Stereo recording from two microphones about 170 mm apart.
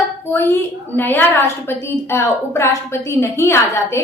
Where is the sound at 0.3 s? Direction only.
15° left (ahead or behind).